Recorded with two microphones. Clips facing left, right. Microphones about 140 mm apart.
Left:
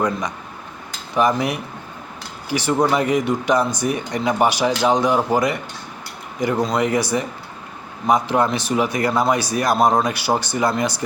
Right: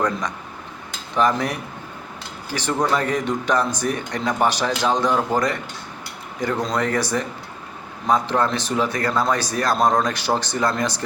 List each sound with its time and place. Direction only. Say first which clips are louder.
1.1 s speech: left 2 dB; 10° left (ahead or behind)